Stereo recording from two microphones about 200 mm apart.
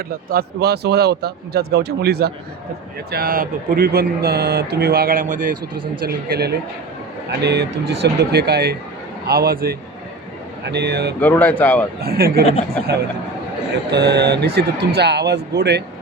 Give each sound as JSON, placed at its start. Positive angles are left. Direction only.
{"t": 0.3, "sound": "speech", "side_deg": -50}
{"t": 11.2, "sound": "speech", "side_deg": 10}
{"t": 12.0, "sound": "speech", "side_deg": -50}
{"t": 13.9, "sound": "speech", "side_deg": -55}